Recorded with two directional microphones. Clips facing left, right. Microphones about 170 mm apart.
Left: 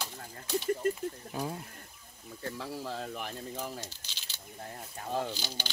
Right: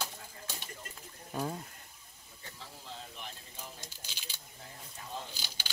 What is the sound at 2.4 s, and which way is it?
Speech, 70° left (ahead or behind).